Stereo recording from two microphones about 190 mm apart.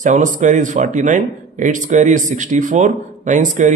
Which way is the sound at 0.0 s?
40° right (ahead or behind).